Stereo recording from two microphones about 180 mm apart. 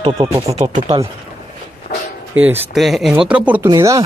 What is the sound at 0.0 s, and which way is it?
Speech, 25° right (ahead or behind).